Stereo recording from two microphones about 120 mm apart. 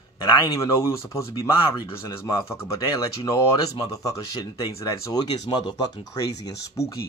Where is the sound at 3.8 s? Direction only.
30° left (ahead or behind).